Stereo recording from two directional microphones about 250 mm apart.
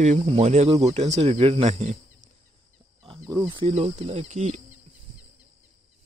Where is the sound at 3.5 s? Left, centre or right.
Right.